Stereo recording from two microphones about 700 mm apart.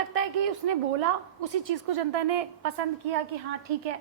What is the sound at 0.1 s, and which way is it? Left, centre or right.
A woman's voice, right.